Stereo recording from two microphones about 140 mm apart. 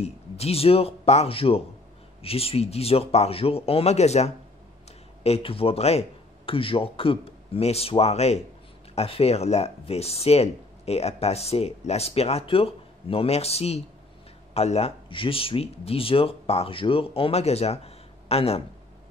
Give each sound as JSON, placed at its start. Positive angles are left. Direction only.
{"t": 0.0, "sound": "speech", "side_deg": 45}